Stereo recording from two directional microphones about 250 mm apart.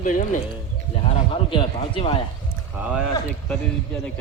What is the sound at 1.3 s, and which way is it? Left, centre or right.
Speech, left.